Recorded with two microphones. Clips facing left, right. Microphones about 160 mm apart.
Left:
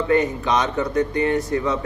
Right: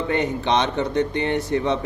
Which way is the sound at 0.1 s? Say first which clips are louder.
Left 2 dB; 25° right (ahead or behind).